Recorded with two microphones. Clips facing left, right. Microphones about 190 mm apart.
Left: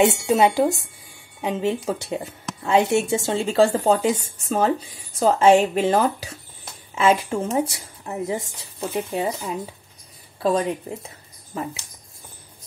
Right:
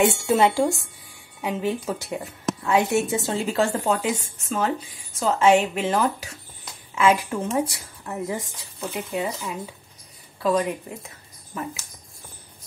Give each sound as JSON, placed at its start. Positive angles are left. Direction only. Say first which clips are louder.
{"t": 0.0, "sound": "speech", "louder": "left 2 dB", "side_deg": 20}
{"t": 10.4, "sound": "speech", "louder": "left 1 dB", "side_deg": 30}